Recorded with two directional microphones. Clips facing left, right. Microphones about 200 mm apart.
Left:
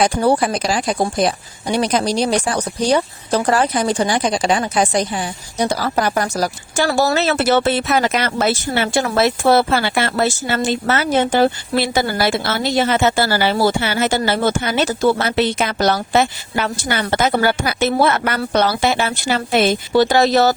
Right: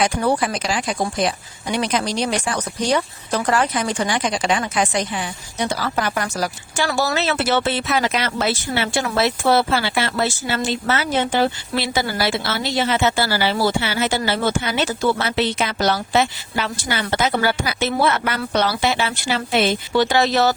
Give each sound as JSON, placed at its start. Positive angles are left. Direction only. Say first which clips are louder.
{"t": 0.0, "sound": "speech", "louder": "left 4 dB", "side_deg": 35}